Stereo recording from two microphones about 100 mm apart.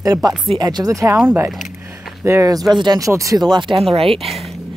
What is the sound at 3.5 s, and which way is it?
Speech, 55° right (ahead or behind).